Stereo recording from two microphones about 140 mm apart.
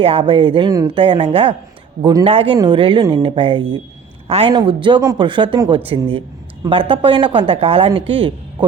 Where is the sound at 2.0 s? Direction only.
25° right (ahead or behind).